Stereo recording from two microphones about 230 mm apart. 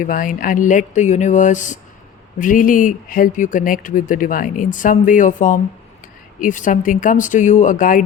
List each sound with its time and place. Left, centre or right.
0.0 s speech: left